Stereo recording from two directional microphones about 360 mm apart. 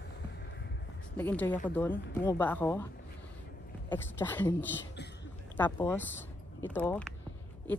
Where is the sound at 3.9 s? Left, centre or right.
Centre.